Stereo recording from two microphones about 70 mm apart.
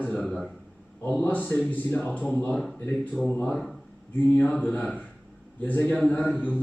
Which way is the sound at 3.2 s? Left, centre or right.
Left.